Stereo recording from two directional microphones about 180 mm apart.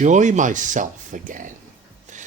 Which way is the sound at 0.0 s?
40° right (ahead or behind).